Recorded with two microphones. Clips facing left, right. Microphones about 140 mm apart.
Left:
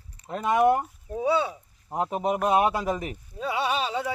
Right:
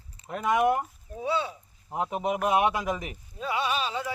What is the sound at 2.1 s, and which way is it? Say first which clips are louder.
A man's voice: left 2 dB; 35° left (ahead or behind).